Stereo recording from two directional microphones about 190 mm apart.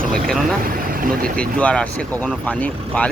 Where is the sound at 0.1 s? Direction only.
Centre (ahead or behind).